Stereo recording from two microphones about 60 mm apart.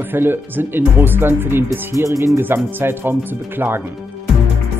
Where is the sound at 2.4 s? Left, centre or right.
Right.